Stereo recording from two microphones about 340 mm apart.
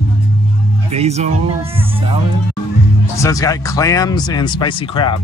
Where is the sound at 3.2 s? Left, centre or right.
Centre.